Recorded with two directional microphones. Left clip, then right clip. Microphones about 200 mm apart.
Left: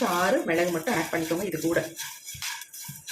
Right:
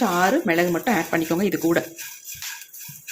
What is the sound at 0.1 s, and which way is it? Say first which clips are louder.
Speech: right 4 dB; 50° right (ahead or behind).